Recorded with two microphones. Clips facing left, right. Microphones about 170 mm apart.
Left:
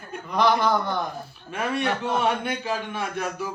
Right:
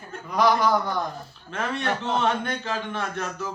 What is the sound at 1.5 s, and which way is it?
A man's voice, 10° left (ahead or behind).